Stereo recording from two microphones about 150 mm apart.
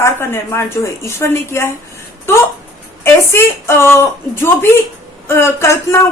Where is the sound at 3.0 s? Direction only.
15° left (ahead or behind).